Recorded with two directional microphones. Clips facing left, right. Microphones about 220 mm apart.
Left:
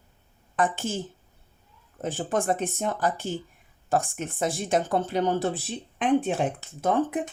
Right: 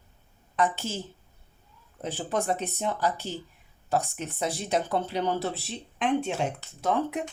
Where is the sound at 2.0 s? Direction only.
50° left (ahead or behind).